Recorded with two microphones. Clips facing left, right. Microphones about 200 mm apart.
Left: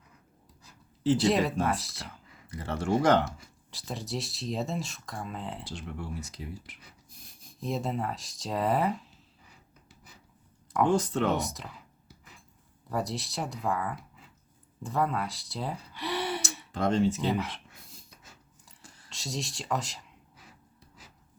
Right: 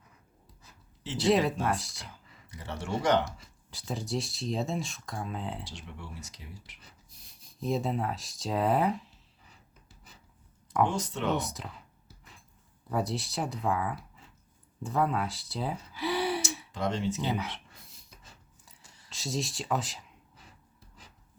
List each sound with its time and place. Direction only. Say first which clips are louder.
1.2 s speech: even; centre (ahead or behind)
2.0 s speech: left 4 dB; 55° left (ahead or behind)
3.7 s speech: right 2 dB; centre (ahead or behind)
5.6 s speech: left 6 dB; 50° left (ahead or behind)
7.6 s speech: right 1 dB; centre (ahead or behind)
10.9 s speech: left 7 dB; 50° left (ahead or behind)
11.3 s clicking: even; centre (ahead or behind)
12.9 s speech: right 1 dB; centre (ahead or behind)
16.7 s speech: left 6 dB; 55° left (ahead or behind)
17.2 s speech: left 3 dB; centre (ahead or behind)
18.2 s a sound: left 1 dB; centre (ahead or behind)
19.0 s speech: right 3 dB; centre (ahead or behind)